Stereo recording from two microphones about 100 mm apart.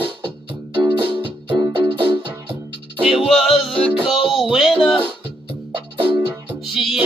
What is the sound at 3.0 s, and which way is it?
Music, 10° right (ahead or behind).